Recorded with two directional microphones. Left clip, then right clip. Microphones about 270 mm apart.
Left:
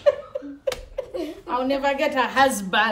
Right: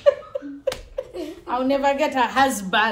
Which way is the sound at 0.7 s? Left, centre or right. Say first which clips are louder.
Even; centre.